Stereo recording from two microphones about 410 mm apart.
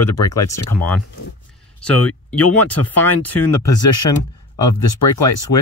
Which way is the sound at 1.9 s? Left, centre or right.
Left.